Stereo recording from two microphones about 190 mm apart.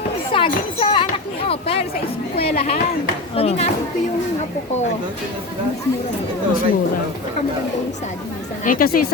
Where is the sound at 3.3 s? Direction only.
30° left (ahead or behind).